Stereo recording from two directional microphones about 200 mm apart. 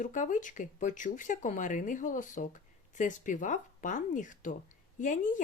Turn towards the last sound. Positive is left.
turn(degrees=40)  # may be behind; listen again after turning